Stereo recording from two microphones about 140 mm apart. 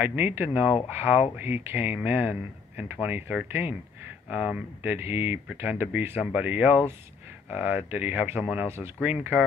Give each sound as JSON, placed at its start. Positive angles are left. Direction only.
{"t": 0.0, "sound": "speech", "side_deg": -15}